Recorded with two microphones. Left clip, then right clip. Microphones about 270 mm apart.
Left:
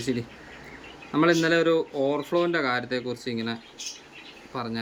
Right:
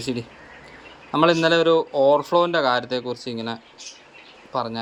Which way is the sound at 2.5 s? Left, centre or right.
Centre.